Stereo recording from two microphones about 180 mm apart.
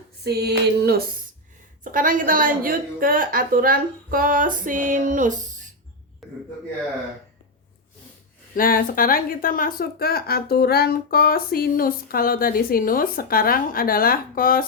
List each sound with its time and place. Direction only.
0.3 s music: 65° right (ahead or behind)
1.8 s a woman's voice: 50° right (ahead or behind)
6.2 s a sound: centre (ahead or behind)
8.5 s speech: 50° left (ahead or behind)